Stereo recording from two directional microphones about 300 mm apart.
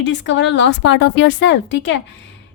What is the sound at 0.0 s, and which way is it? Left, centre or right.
A woman's voice, left.